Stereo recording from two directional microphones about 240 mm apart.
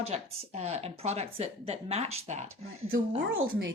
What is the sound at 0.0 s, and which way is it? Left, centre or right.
Speech, right.